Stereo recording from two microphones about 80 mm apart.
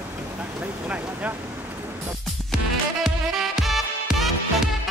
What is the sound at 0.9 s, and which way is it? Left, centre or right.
Speech, centre.